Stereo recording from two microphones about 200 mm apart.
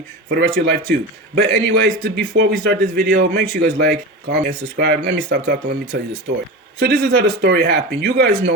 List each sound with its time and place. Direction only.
0.3 s a man's voice: 55° right (ahead or behind)